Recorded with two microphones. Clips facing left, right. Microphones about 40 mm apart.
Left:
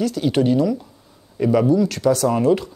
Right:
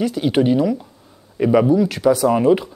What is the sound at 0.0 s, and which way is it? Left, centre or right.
Speech, centre.